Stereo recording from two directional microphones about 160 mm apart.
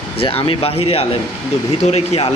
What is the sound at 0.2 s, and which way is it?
Speech, 35° left (ahead or behind).